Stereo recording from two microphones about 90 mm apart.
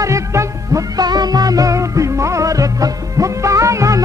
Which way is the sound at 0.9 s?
50° right (ahead or behind).